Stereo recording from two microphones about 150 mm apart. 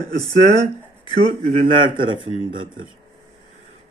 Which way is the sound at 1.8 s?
35° right (ahead or behind).